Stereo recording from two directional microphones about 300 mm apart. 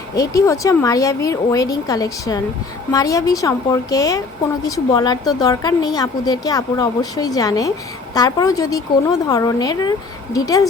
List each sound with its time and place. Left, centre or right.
0.1 s a woman's voice: centre